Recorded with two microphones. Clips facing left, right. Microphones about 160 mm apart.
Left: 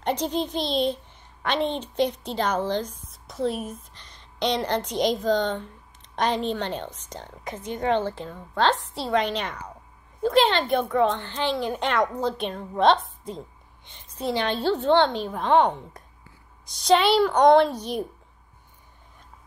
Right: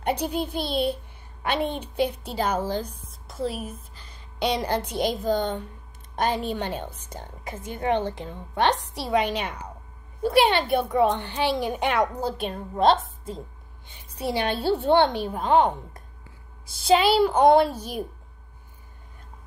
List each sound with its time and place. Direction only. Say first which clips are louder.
0.0 s a child's voice: even; 10° right (ahead or behind)